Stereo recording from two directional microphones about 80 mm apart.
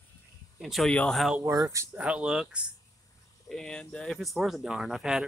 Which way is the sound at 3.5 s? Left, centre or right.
Centre.